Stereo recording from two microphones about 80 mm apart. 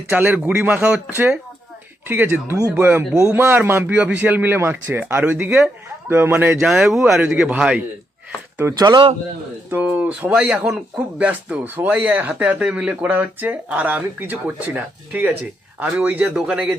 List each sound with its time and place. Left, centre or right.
0.1 s speech: centre
1.1 s speech: right
3.1 s speech: centre
3.3 s speech: right
5.5 s speech: centre
6.1 s speech: right
6.6 s speech: centre
8.6 s speech: right